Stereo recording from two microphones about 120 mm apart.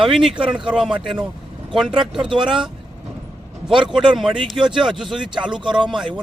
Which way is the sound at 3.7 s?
45° right (ahead or behind).